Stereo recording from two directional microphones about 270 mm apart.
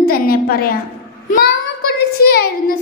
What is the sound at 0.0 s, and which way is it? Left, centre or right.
Speech, left.